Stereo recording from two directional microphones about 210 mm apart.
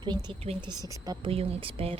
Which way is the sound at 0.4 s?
20° right (ahead or behind).